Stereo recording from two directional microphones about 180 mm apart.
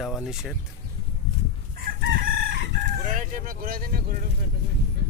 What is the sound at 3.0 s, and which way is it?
Speech, 45° right (ahead or behind).